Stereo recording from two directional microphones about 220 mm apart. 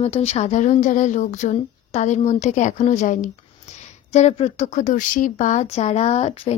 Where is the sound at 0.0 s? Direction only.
30° left (ahead or behind).